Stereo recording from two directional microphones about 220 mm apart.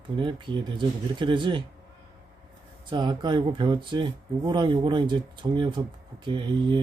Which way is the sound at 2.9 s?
20° right (ahead or behind).